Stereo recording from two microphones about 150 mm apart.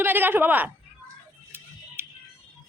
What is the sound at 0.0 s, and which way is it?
Speech, 15° right (ahead or behind).